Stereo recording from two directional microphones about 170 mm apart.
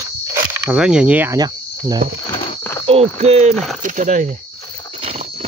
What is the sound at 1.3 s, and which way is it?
Speech, 25° right (ahead or behind).